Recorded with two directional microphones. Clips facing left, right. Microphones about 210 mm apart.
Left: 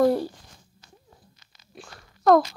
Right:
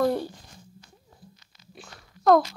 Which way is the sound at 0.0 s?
5° left (ahead or behind).